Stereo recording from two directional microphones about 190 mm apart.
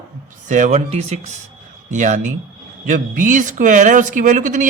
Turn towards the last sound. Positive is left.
turn(degrees=-40)  # may be behind; listen again after turning